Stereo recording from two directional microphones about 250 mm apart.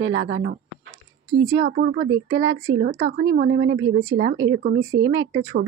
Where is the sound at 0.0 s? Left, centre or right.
Right.